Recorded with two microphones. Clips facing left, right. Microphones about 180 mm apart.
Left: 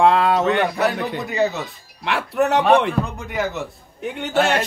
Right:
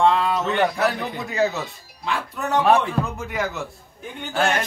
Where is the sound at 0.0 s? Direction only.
65° left (ahead or behind).